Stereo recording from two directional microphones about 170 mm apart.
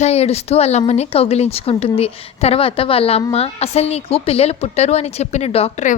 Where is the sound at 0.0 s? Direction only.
40° left (ahead or behind).